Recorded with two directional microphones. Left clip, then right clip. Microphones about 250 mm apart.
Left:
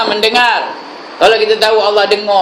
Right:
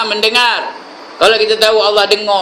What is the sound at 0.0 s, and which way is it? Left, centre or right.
A man's voice, centre.